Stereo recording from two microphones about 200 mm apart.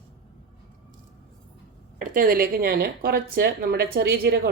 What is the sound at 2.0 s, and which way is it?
A woman's voice, 45° right (ahead or behind).